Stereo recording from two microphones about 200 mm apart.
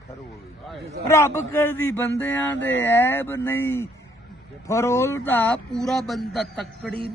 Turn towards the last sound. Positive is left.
turn(degrees=0)  # may be behind; listen again after turning